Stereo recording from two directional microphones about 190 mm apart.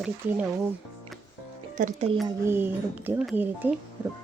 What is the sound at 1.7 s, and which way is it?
Speech, 40° right (ahead or behind).